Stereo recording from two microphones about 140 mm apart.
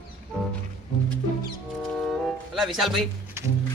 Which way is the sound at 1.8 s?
Centre (ahead or behind).